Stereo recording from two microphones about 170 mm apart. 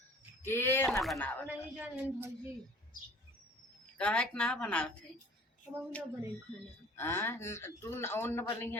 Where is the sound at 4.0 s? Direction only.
5° left (ahead or behind).